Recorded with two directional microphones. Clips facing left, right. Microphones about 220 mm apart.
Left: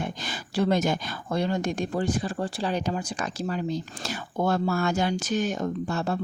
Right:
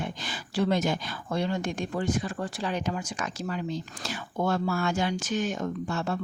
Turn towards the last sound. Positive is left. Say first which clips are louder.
# left 2 dB
turn(degrees=35)  # may be behind; listen again after turning